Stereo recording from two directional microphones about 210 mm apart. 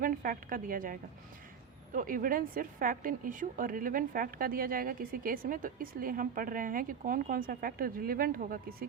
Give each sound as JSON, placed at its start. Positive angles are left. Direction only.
{"t": 0.0, "sound": "a woman's voice", "side_deg": -40}